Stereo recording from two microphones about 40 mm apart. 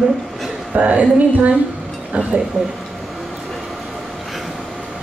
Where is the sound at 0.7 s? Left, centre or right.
Right.